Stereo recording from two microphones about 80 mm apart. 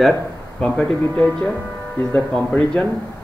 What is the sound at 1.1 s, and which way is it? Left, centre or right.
Speech, left.